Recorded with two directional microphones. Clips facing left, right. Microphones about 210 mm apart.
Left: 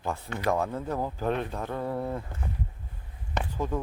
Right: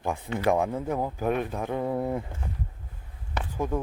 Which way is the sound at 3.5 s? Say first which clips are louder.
Right 3 dB; 10° right (ahead or behind).